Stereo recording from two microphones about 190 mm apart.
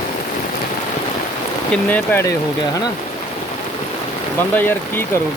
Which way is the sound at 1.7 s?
10° left (ahead or behind).